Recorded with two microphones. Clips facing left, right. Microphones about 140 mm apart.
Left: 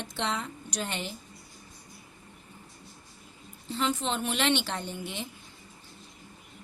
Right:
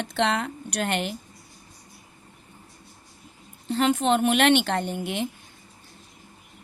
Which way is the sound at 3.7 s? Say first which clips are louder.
Right 8 dB; 60° right (ahead or behind).